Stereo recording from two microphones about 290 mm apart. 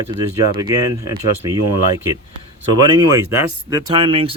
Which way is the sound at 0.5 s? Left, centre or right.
Centre.